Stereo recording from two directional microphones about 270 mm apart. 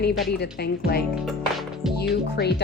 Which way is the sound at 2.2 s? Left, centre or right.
Left.